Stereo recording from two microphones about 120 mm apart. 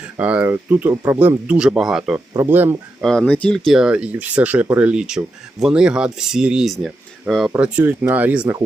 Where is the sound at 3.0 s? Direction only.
5° left (ahead or behind).